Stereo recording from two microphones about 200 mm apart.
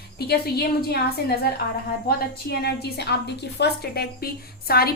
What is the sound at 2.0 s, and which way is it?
A woman's voice, 50° left (ahead or behind).